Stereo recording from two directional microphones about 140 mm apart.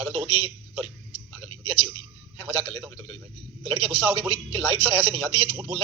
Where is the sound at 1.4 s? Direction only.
45° right (ahead or behind).